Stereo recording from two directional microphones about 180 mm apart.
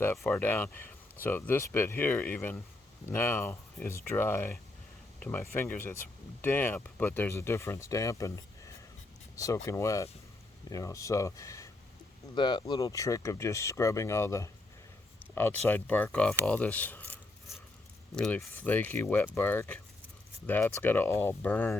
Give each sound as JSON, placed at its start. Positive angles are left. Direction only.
{"t": 0.2, "sound": "speech", "side_deg": 10}